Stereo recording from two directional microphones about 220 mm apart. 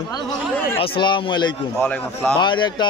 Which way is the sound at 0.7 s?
20° left (ahead or behind).